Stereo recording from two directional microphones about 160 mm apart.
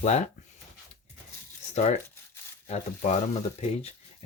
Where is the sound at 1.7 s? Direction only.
45° left (ahead or behind).